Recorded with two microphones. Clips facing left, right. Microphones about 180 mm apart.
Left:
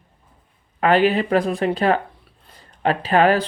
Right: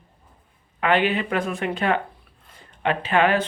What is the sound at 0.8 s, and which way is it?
Speech, 40° left (ahead or behind).